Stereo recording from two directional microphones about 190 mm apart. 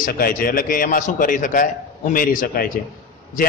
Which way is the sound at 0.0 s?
50° left (ahead or behind).